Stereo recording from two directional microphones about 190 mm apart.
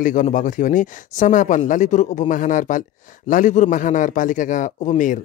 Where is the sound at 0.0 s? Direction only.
45° left (ahead or behind).